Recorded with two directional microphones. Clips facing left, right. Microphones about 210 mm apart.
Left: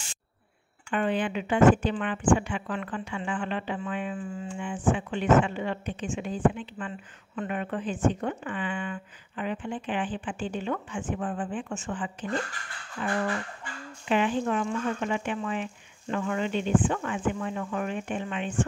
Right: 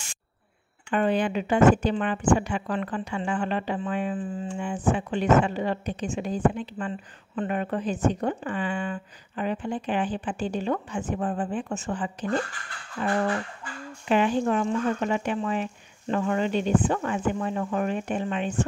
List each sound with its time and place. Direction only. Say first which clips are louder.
0.8 s speech: right 3 dB; 40° right (ahead or behind)